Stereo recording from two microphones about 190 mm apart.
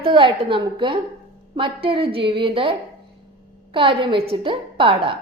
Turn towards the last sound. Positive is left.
turn(degrees=-30)  # may be behind; listen again after turning